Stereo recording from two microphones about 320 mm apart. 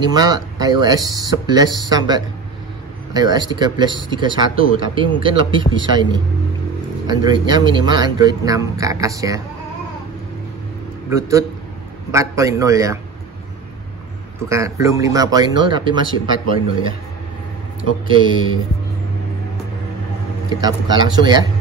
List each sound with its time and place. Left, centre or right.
0.0 s speech: centre
11.1 s speech: centre
14.5 s speech: centre
18.0 s speech: centre
20.6 s speech: centre